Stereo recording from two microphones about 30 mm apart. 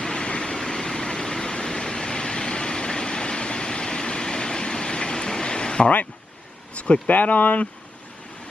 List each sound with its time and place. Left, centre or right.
0.0 s vehicle: left
7.1 s speech: left